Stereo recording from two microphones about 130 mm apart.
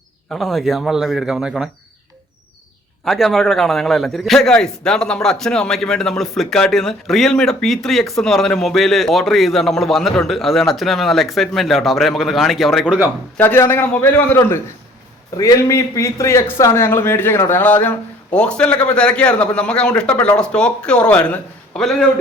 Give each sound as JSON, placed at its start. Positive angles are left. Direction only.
{"t": 0.3, "sound": "a man's voice", "side_deg": 0}
{"t": 3.0, "sound": "a man's voice", "side_deg": 0}
{"t": 13.3, "sound": "a man's voice", "side_deg": 15}